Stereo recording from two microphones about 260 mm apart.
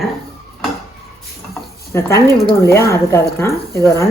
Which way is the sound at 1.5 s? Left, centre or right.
Centre.